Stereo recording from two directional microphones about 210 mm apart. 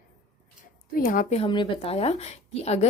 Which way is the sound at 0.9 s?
40° left (ahead or behind).